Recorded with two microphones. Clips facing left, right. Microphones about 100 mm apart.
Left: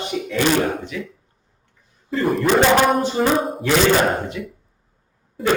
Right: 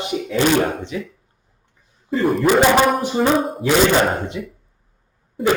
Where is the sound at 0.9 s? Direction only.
30° right (ahead or behind).